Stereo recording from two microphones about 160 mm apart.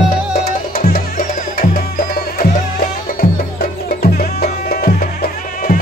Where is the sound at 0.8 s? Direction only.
60° left (ahead or behind).